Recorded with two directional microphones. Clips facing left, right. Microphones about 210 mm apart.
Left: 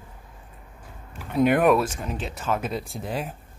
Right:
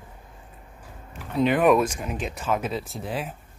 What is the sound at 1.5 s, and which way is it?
Speech, 5° left (ahead or behind).